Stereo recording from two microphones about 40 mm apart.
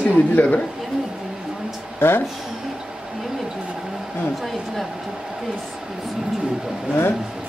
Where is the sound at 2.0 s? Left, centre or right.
Left.